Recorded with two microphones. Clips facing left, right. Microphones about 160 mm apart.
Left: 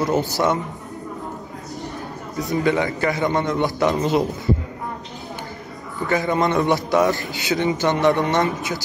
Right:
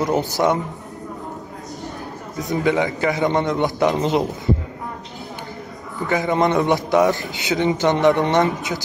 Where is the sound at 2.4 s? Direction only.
20° right (ahead or behind).